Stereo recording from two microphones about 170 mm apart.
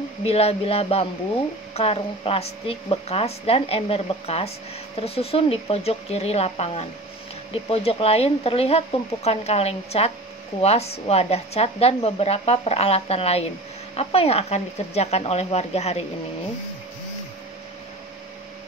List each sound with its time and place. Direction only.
0.2 s a woman's voice: 35° left (ahead or behind)